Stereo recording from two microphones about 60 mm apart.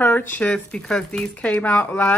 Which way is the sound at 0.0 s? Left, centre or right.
Left.